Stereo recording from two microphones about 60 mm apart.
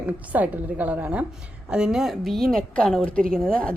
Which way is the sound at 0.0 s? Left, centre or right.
Right.